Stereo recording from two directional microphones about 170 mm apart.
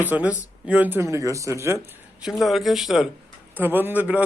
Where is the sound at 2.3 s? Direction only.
Centre (ahead or behind).